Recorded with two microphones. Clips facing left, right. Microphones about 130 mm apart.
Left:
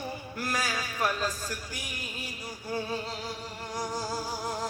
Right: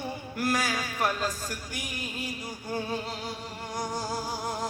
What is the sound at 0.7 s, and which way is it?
Music, 20° right (ahead or behind).